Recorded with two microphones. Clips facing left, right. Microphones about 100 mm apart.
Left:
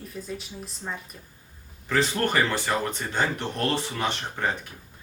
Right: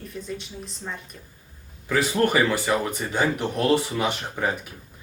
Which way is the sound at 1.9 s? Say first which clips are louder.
Right 3 dB; 10° right (ahead or behind).